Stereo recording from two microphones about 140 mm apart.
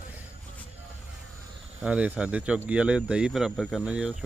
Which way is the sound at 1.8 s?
10° right (ahead or behind).